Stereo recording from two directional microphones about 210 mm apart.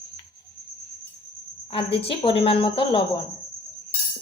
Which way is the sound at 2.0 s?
25° left (ahead or behind).